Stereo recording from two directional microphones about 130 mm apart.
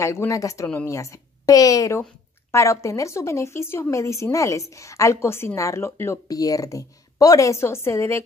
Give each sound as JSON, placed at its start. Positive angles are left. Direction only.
{"t": 0.0, "sound": "a woman's voice", "side_deg": 20}